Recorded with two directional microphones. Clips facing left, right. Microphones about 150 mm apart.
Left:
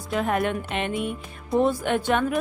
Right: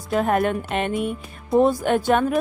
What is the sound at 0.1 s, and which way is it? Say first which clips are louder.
Speech: right 4 dB; 45° right (ahead or behind).